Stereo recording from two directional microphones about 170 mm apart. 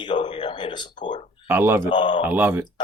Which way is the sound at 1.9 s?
30° left (ahead or behind).